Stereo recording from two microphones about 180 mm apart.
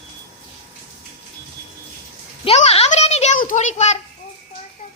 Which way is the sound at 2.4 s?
35° left (ahead or behind).